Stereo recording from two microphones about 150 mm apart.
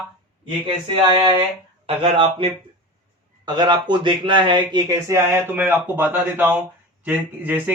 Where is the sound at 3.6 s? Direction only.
30° right (ahead or behind).